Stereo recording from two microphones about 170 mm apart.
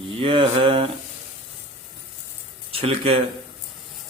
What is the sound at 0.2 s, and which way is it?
Speech, 30° right (ahead or behind).